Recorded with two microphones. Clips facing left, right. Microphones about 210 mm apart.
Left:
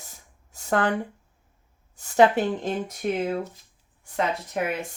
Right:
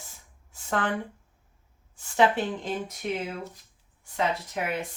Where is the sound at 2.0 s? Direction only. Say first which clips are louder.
Left 5 dB; 40° left (ahead or behind).